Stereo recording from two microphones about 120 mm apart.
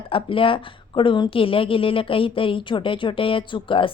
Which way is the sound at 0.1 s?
45° left (ahead or behind).